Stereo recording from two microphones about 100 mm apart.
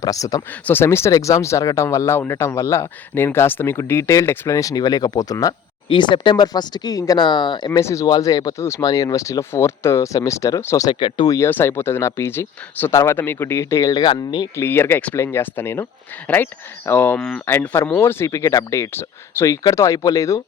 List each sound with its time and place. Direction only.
0.0 s speech: 35° left (ahead or behind)
0.6 s speech: 20° left (ahead or behind)
5.9 s speech: 50° left (ahead or behind)
7.8 s speech: 30° left (ahead or behind)
11.4 s speech: 25° left (ahead or behind)
14.0 s speech: 50° left (ahead or behind)
14.5 s speech: 25° left (ahead or behind)